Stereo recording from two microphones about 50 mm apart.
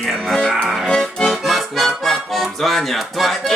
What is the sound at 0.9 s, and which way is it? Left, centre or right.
Accordion, centre.